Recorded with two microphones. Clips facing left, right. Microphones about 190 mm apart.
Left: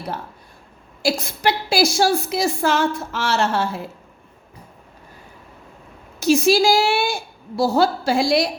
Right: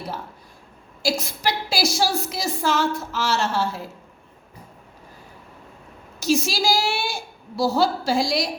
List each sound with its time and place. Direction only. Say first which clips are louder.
1.0 s a woman's voice: left 4 dB; 55° left (ahead or behind)
6.1 s a woman's voice: left 7 dB; 60° left (ahead or behind)